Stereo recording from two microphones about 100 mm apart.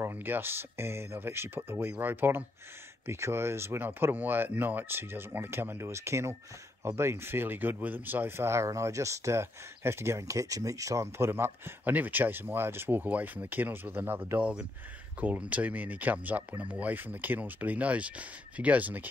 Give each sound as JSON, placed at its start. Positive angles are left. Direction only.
{"t": 0.0, "sound": "speech", "side_deg": -20}